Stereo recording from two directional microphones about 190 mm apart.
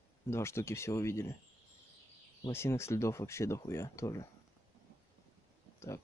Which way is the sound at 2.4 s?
15° left (ahead or behind).